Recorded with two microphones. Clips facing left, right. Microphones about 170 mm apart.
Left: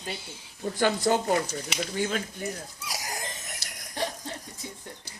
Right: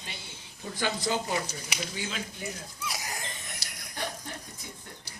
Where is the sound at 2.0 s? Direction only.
50° left (ahead or behind).